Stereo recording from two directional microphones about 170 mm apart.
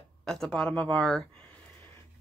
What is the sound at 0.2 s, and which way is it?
Speech, 5° left (ahead or behind).